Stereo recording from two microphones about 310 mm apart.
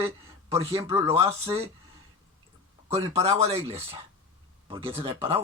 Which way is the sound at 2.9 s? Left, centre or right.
Centre.